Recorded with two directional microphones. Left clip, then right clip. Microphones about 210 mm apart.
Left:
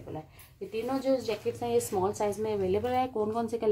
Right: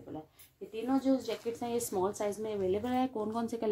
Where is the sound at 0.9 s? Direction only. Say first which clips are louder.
Left 2 dB; 25° right (ahead or behind).